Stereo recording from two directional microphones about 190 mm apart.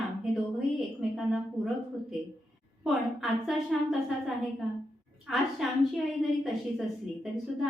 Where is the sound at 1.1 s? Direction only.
Centre (ahead or behind).